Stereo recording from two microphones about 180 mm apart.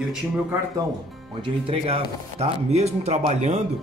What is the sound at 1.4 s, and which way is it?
Speech, 30° right (ahead or behind).